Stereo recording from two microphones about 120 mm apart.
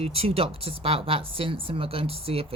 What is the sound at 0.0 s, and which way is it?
Speech, 50° right (ahead or behind).